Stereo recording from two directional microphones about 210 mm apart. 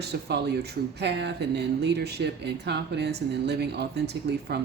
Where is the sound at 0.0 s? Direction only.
50° right (ahead or behind).